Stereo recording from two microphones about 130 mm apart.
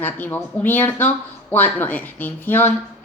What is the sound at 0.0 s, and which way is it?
Speech, 15° left (ahead or behind).